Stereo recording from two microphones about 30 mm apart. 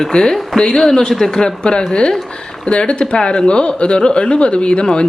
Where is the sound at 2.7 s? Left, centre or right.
Left.